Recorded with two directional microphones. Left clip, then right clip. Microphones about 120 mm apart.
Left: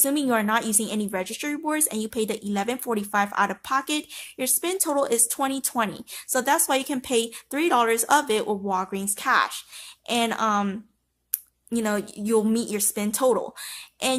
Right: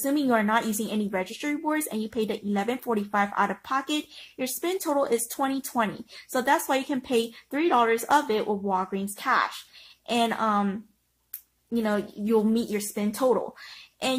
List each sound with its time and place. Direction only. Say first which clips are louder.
0.0 s a woman's voice: left 1 dB; 5° left (ahead or behind)
11.7 s speech: left 1 dB; 15° left (ahead or behind)